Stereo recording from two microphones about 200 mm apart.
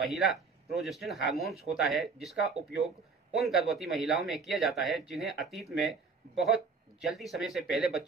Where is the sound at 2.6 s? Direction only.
30° right (ahead or behind).